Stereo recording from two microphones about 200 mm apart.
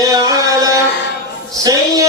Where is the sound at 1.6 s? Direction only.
15° right (ahead or behind).